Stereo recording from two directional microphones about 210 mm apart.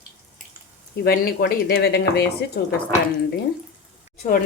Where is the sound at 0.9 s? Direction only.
50° left (ahead or behind).